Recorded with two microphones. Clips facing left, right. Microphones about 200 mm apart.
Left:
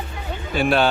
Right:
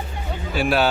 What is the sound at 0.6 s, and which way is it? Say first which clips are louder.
Speech: left 1 dB; 5° right (ahead or behind).